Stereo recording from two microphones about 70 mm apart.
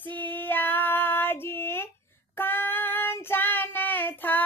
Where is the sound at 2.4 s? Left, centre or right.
Left.